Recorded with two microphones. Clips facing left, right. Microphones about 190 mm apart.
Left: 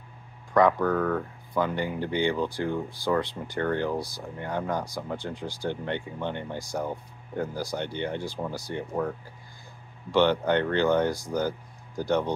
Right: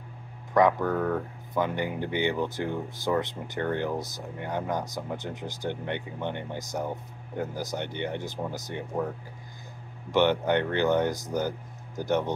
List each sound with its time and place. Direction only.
0.6 s speech: 20° right (ahead or behind)
10.1 s speech: 20° right (ahead or behind)